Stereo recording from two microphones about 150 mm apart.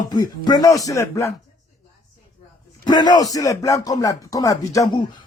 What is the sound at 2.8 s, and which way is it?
Speech, 30° left (ahead or behind).